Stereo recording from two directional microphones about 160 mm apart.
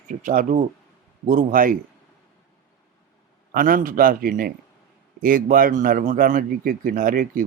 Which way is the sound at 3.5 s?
60° right (ahead or behind).